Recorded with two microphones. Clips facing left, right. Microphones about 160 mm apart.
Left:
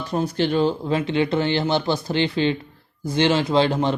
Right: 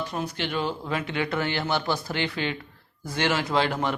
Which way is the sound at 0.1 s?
35° left (ahead or behind).